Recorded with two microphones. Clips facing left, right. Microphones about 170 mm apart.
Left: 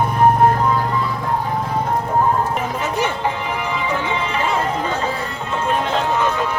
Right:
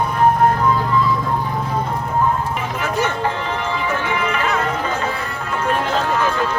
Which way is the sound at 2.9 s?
15° left (ahead or behind).